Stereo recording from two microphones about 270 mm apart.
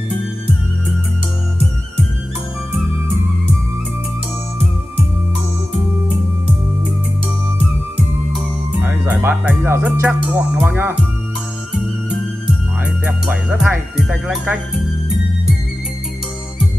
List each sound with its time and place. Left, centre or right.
8.3 s music: centre
13.0 s speech: centre